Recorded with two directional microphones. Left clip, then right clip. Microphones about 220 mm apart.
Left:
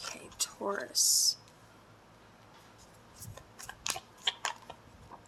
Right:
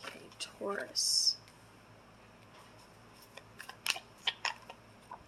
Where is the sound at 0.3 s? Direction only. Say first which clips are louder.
Left 3 dB; 25° left (ahead or behind).